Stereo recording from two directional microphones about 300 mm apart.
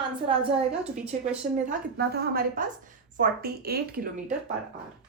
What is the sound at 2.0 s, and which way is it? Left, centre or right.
A woman's voice, right.